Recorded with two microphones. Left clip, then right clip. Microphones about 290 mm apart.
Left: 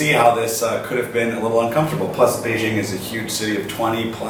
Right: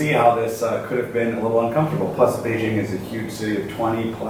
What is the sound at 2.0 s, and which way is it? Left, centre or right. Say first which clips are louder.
Speech: left 1 dB; centre.